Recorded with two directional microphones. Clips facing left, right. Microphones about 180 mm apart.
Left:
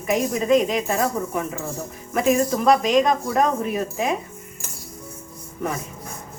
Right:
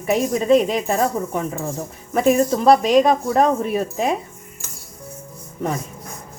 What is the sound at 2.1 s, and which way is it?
Speech, 35° right (ahead or behind).